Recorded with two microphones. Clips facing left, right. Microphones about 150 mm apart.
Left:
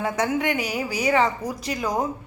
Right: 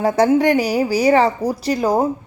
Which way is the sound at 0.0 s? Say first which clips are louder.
Right 9 dB; 35° right (ahead or behind).